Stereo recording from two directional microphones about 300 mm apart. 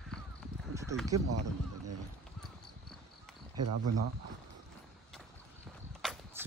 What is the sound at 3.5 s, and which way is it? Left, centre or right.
Speech, right.